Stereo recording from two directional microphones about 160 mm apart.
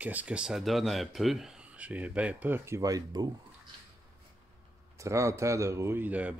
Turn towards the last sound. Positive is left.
turn(degrees=-10)  # may be behind; listen again after turning